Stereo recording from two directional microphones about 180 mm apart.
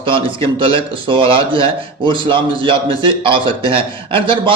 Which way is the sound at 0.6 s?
30° right (ahead or behind).